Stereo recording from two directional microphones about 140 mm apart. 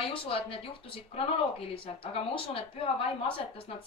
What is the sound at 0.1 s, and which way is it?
Speech, 40° left (ahead or behind).